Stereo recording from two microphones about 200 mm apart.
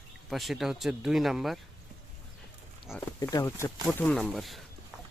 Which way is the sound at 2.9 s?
10° left (ahead or behind).